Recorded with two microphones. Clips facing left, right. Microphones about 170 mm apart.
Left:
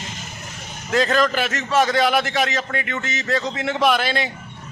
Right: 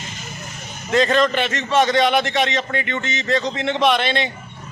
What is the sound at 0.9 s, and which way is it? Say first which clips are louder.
A man's voice: right 2 dB; centre (ahead or behind).